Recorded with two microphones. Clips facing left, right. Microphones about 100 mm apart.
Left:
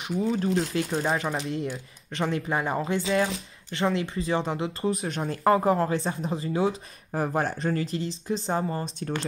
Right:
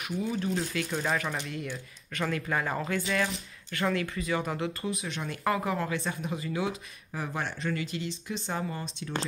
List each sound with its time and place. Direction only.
0.0 s speech: 30° left (ahead or behind)